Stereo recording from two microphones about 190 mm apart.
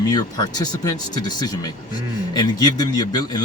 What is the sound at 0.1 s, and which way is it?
Speech, 20° left (ahead or behind).